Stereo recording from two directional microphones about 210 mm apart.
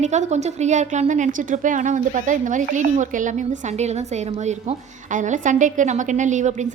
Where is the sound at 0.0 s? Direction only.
35° right (ahead or behind).